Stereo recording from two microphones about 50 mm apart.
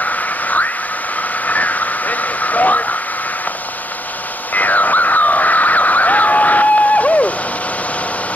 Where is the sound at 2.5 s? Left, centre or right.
Left.